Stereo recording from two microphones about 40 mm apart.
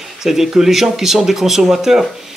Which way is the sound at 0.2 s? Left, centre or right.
Centre.